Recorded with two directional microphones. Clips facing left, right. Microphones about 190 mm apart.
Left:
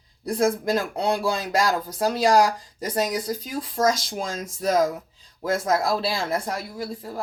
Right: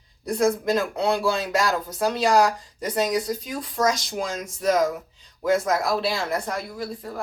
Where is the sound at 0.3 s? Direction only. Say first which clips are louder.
Right 1 dB; 30° left (ahead or behind).